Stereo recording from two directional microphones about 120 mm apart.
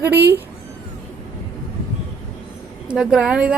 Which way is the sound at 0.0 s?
20° right (ahead or behind).